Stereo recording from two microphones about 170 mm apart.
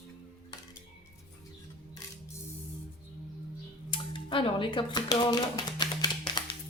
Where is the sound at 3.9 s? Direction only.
30° left (ahead or behind).